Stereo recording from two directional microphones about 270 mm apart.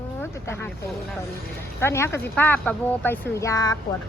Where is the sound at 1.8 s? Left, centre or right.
Centre.